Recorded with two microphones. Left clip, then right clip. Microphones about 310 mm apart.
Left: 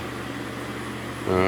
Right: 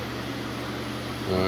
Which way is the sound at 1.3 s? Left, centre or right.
Centre.